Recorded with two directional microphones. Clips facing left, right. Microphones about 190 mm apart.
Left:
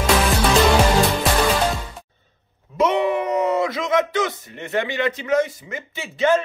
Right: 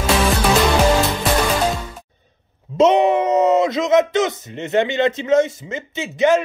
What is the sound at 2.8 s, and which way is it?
Speech, 20° right (ahead or behind).